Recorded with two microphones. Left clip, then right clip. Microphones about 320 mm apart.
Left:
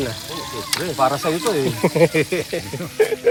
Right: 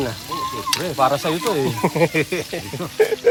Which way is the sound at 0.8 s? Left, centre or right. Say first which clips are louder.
Even; right.